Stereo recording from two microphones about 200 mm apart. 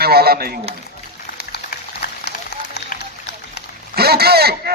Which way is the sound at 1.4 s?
50° left (ahead or behind).